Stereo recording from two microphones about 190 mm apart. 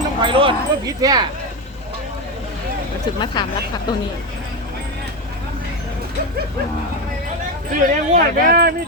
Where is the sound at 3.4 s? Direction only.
20° left (ahead or behind).